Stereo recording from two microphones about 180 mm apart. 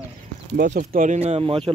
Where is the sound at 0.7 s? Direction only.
45° right (ahead or behind).